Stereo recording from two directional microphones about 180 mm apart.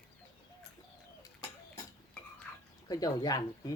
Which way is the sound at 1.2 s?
20° left (ahead or behind).